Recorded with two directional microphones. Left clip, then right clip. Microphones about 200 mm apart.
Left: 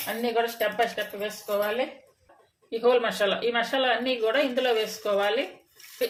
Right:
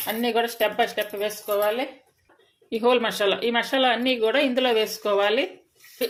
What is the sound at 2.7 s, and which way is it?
A woman's voice, 35° right (ahead or behind).